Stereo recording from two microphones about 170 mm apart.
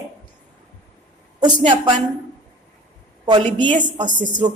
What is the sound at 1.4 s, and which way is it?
Speech, 30° right (ahead or behind).